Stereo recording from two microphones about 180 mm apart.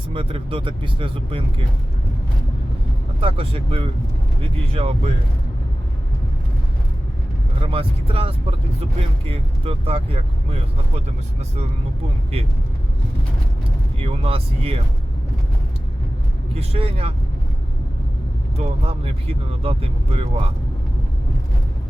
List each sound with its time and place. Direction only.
0.1 s speech: 30° right (ahead or behind)
3.2 s speech: 30° right (ahead or behind)
7.6 s speech: 30° right (ahead or behind)
14.0 s speech: 30° right (ahead or behind)
16.6 s speech: 30° right (ahead or behind)
18.5 s speech: 35° right (ahead or behind)